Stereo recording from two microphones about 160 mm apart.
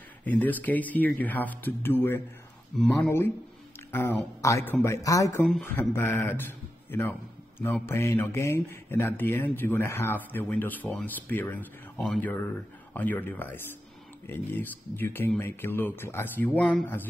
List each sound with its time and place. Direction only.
0.2 s speech: 10° left (ahead or behind)
2.7 s speech: 5° left (ahead or behind)
3.1 s speech: 15° left (ahead or behind)